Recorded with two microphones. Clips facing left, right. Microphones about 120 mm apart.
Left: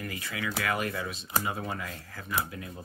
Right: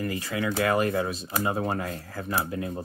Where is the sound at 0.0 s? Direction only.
35° right (ahead or behind).